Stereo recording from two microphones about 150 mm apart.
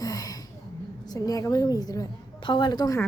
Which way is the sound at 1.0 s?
25° left (ahead or behind).